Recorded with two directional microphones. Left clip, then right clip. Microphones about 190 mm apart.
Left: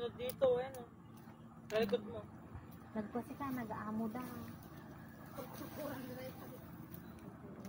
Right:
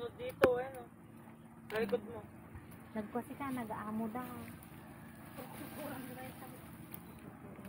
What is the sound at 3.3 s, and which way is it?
Speech, 20° right (ahead or behind).